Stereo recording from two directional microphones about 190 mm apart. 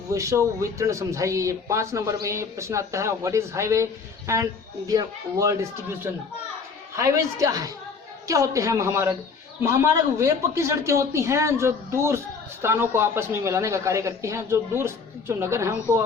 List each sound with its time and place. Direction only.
0.1 s speech: 15° right (ahead or behind)
6.9 s speech: 15° right (ahead or behind)